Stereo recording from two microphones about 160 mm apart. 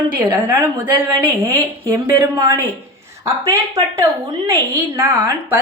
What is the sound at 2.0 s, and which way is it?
Speech, 20° right (ahead or behind).